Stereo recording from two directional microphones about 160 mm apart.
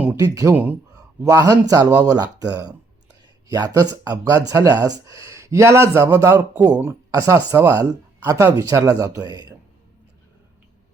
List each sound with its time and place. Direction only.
0.2 s speech: 20° right (ahead or behind)
0.5 s speech: 10° right (ahead or behind)
0.9 s speech: 20° right (ahead or behind)